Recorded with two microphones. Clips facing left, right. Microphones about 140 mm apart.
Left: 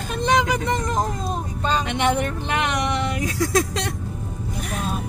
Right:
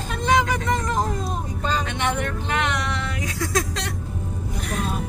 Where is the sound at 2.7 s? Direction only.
15° left (ahead or behind).